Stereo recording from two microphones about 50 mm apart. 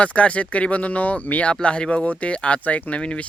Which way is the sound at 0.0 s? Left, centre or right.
Left.